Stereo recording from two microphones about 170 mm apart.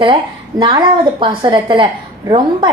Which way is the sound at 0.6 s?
30° right (ahead or behind).